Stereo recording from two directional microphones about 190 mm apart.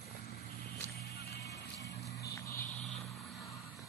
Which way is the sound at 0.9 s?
55° left (ahead or behind).